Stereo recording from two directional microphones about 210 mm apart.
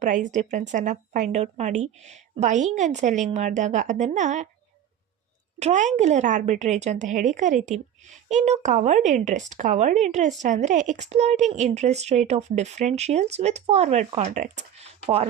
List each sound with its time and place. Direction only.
0.0 s speech: 35° right (ahead or behind)
5.5 s speech: 35° right (ahead or behind)